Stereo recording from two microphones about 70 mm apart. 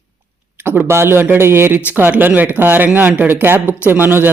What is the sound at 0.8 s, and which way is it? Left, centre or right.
Speech, right.